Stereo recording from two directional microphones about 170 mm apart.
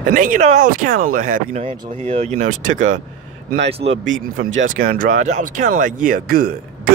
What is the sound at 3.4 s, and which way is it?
Speech, 90° right.